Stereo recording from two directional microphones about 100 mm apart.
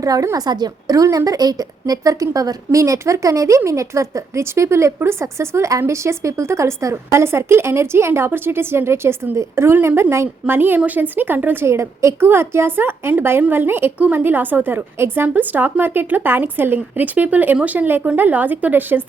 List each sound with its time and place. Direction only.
0.0 s a woman's voice: 35° right (ahead or behind)